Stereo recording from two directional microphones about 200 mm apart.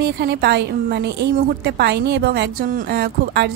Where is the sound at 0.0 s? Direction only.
50° right (ahead or behind).